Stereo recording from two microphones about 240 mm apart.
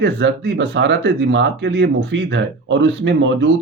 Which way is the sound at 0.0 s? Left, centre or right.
Right.